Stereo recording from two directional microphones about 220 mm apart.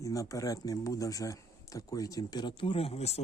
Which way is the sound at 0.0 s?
15° left (ahead or behind).